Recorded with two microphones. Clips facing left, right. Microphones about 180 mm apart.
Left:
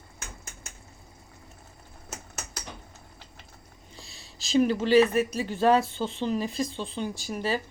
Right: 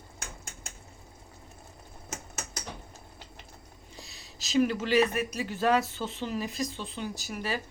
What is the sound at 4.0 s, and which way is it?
Speech, 30° left (ahead or behind).